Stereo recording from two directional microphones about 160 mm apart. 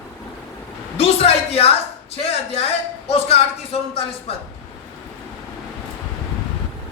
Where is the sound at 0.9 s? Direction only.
40° left (ahead or behind).